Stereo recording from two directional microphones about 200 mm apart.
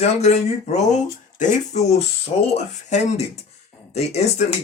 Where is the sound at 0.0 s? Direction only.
35° left (ahead or behind).